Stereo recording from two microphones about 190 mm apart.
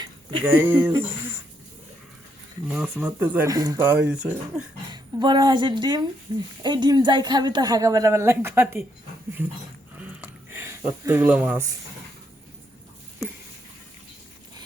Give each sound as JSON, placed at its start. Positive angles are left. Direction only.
{"t": 0.4, "sound": "speech", "side_deg": -10}
{"t": 2.6, "sound": "speech", "side_deg": -5}
{"t": 4.9, "sound": "a woman's voice", "side_deg": -20}
{"t": 10.0, "sound": "a sound", "side_deg": -10}